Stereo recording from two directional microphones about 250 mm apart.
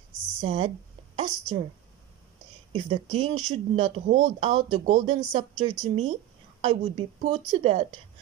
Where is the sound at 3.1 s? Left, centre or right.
Right.